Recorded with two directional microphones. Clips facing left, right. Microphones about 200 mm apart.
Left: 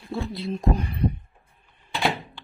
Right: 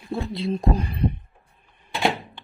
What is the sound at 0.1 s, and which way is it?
Speech, 20° right (ahead or behind).